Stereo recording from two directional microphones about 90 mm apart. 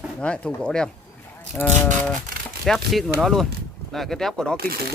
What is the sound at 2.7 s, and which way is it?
Speech, 5° left (ahead or behind).